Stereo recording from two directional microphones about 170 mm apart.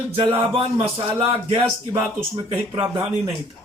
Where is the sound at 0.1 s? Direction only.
30° right (ahead or behind).